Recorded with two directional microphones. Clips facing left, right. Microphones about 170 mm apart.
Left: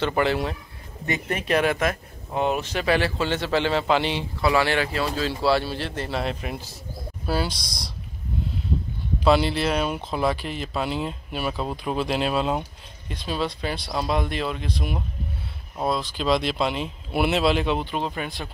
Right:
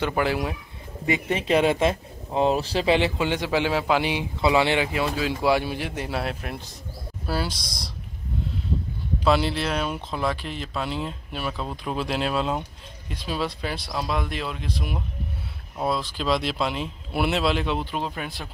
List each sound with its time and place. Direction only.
0.1 s speech: 5° right (ahead or behind)
1.3 s speech: 25° right (ahead or behind); by 7.7 s centre (ahead or behind)
9.2 s speech: centre (ahead or behind)